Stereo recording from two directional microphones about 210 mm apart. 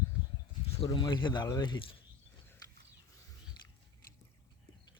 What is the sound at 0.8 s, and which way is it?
Speech, 20° left (ahead or behind).